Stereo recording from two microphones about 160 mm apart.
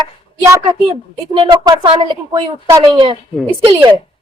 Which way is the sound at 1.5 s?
25° right (ahead or behind).